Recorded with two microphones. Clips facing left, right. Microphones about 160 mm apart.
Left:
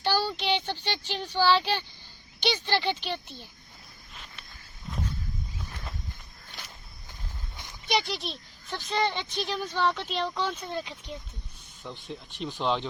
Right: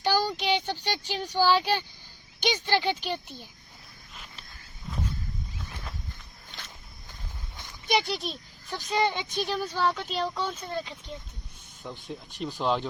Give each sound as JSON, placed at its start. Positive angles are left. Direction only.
{"t": 0.0, "sound": "speech", "side_deg": -10}
{"t": 7.1, "sound": "walk", "side_deg": 15}
{"t": 7.9, "sound": "speech", "side_deg": -5}